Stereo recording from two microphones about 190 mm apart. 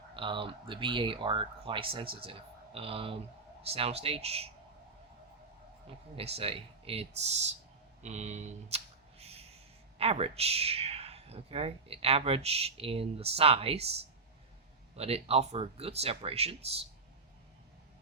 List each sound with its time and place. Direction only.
0.1 s speech: 25° right (ahead or behind)
6.1 s speech: 30° right (ahead or behind)